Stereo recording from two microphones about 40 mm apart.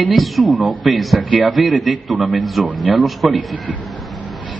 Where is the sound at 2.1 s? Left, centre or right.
Right.